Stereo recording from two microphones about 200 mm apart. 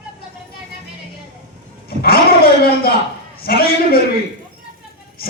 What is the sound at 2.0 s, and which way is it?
A man's voice, 50° left (ahead or behind).